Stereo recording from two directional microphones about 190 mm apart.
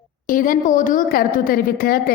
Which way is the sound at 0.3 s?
45° left (ahead or behind).